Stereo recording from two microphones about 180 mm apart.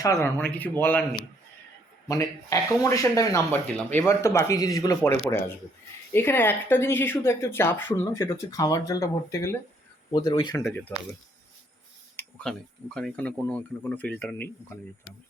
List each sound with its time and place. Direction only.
0.0 s speech: 15° left (ahead or behind)
2.0 s speech: 20° left (ahead or behind)
10.6 s speech: 10° left (ahead or behind)
12.1 s speech: 5° left (ahead or behind)